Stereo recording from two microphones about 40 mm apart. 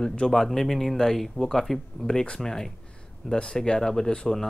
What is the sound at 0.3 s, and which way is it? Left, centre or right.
Speech, centre.